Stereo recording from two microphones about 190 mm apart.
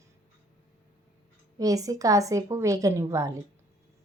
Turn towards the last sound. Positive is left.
turn(degrees=-15)  # may be behind; listen again after turning